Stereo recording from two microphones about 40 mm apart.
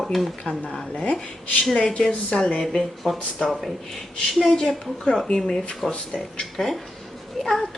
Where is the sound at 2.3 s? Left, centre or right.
Centre.